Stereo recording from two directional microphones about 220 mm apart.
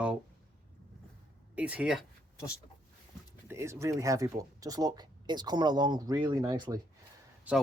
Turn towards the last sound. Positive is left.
turn(degrees=-5)  # may be behind; listen again after turning